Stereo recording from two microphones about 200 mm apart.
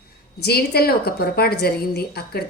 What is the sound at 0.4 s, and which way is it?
A woman's voice, 50° left (ahead or behind).